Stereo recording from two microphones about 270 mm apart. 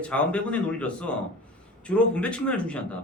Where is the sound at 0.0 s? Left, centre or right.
Centre.